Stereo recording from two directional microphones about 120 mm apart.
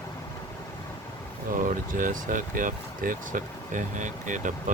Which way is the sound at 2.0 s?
90° right.